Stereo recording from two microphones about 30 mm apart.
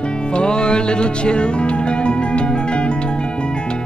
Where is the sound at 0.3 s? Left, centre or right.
Left.